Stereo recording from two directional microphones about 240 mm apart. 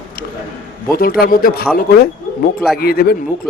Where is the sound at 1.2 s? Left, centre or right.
Left.